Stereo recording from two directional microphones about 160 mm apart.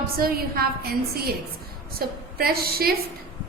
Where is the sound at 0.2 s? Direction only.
65° right (ahead or behind).